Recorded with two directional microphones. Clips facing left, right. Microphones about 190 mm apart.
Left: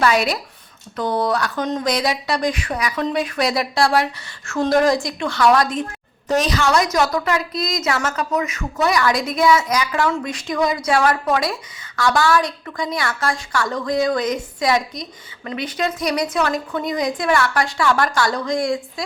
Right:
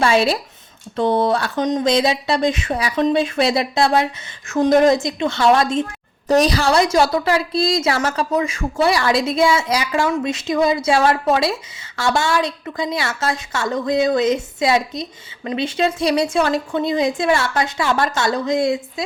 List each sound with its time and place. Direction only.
0.0 s a woman's voice: 25° right (ahead or behind)